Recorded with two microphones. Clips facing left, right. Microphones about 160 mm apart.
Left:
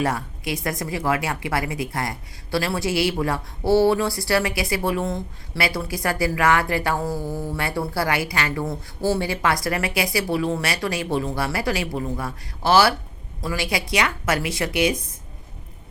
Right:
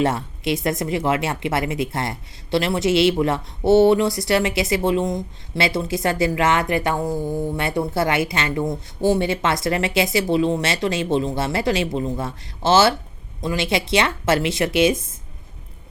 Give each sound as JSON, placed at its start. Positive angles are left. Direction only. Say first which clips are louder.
{"t": 0.0, "sound": "a woman's voice", "louder": "right 4 dB", "side_deg": -25}